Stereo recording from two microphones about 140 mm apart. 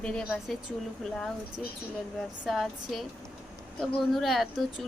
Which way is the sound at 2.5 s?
Centre (ahead or behind).